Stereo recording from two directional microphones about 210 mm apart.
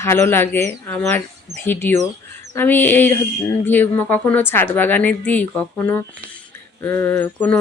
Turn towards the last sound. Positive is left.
turn(degrees=10)  # may be behind; listen again after turning